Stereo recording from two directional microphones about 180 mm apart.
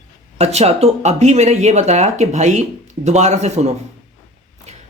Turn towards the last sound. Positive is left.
turn(degrees=-40)  # may be behind; listen again after turning